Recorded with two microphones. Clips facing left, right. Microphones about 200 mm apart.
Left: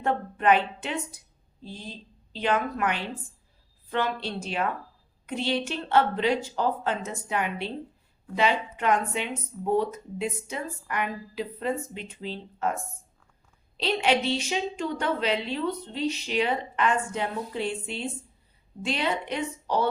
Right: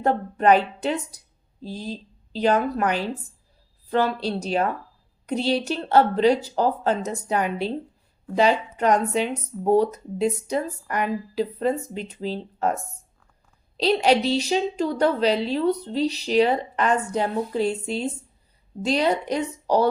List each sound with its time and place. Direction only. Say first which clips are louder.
0.0 s speech: right 5 dB; 40° right (ahead or behind)
13.7 s speech: right 6 dB; 40° right (ahead or behind)